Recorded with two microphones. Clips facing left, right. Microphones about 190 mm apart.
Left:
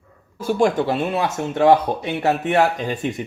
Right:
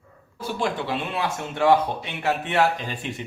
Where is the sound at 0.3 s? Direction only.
45° left (ahead or behind).